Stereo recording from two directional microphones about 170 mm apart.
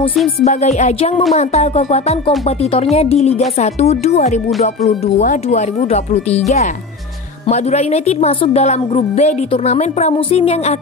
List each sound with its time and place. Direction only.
0.4 s speech: 40° left (ahead or behind)